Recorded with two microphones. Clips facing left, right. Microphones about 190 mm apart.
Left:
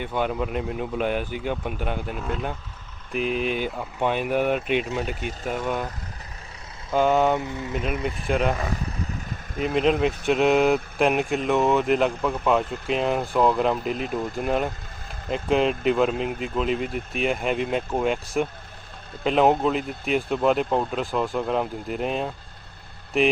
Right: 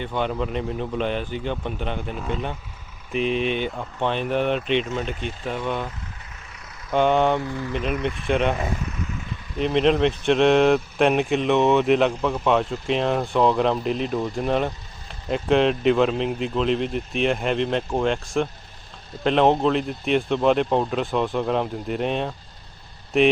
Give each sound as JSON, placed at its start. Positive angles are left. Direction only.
{"t": 0.0, "sound": "speech", "side_deg": 5}
{"t": 6.9, "sound": "speech", "side_deg": 5}
{"t": 7.3, "sound": "speech", "side_deg": 20}
{"t": 7.7, "sound": "speech", "side_deg": 5}
{"t": 8.8, "sound": "vehicle", "side_deg": 35}
{"t": 9.6, "sound": "speech", "side_deg": 5}